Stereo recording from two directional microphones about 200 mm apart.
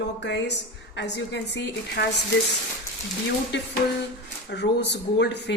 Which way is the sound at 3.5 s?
60° left (ahead or behind).